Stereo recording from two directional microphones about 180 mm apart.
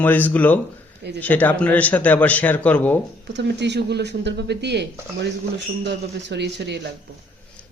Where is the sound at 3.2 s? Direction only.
75° right (ahead or behind).